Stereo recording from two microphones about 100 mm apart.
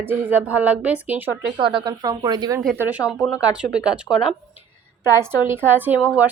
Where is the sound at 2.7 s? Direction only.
20° right (ahead or behind).